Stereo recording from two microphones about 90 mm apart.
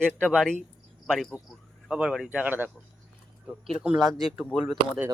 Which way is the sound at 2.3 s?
15° right (ahead or behind).